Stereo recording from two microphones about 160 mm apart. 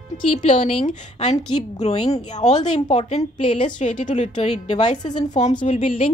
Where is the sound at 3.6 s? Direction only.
50° left (ahead or behind).